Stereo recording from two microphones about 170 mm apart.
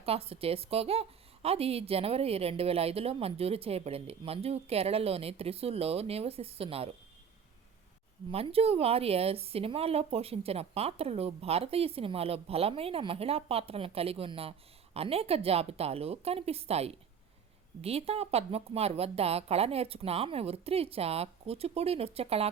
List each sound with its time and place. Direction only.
0.0 s a woman's voice: 35° right (ahead or behind)
8.3 s a woman's voice: 35° right (ahead or behind)